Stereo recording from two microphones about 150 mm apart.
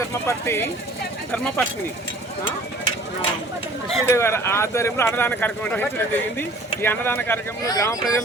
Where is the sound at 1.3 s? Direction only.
5° left (ahead or behind).